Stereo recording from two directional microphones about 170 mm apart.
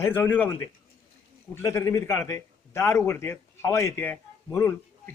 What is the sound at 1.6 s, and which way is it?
A man's voice, 15° left (ahead or behind).